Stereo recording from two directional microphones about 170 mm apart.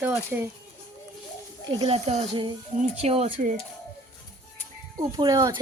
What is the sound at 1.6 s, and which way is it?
Speech, 30° right (ahead or behind).